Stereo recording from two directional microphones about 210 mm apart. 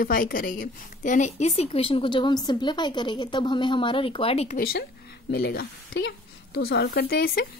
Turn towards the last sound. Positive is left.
turn(degrees=50)  # may be behind; listen again after turning